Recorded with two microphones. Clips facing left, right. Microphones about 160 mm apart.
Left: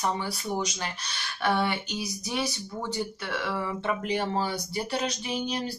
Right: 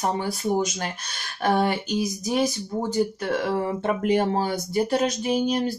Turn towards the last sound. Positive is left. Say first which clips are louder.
# right 8 dB
turn(degrees=-45)  # may be behind; listen again after turning